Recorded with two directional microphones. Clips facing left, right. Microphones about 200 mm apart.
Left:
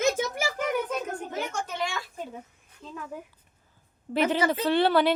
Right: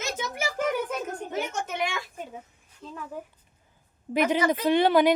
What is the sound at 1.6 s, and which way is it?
Speech, 20° right (ahead or behind).